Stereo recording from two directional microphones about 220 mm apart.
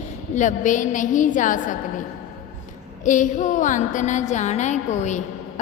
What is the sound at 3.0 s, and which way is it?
Mantra, 35° left (ahead or behind).